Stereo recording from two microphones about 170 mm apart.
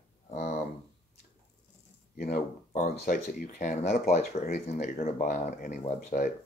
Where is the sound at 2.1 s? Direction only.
60° left (ahead or behind).